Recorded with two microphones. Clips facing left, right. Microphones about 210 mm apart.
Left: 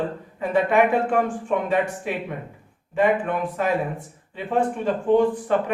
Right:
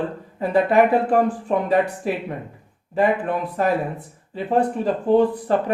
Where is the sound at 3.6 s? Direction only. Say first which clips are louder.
Right 4 dB; 35° right (ahead or behind).